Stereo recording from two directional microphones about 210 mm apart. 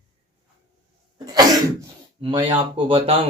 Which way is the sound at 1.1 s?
20° right (ahead or behind).